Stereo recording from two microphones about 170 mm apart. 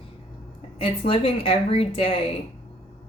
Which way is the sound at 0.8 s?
35° left (ahead or behind).